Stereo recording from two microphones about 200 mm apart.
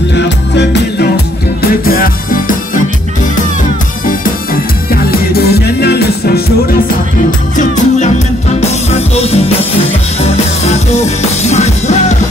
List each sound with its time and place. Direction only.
0.1 s music: 55° left (ahead or behind)
1.9 s music: 45° left (ahead or behind)
4.0 s music: 45° left (ahead or behind)
5.3 s music: 55° left (ahead or behind)
7.5 s music: 35° left (ahead or behind)
9.1 s music: 30° left (ahead or behind)